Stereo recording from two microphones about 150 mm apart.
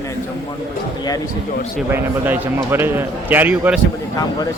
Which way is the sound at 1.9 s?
15° right (ahead or behind).